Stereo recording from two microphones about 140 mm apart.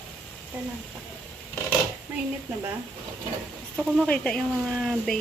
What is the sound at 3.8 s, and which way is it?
Speech, centre (ahead or behind).